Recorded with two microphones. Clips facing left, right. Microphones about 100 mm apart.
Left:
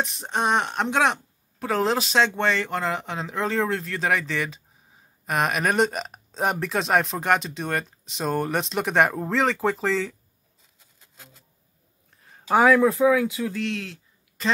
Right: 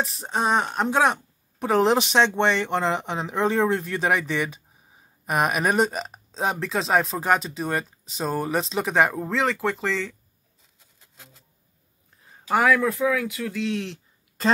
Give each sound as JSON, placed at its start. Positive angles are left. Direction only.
{"t": 0.0, "sound": "speech", "side_deg": 0}
{"t": 1.6, "sound": "speech", "side_deg": -20}
{"t": 12.5, "sound": "speech", "side_deg": 15}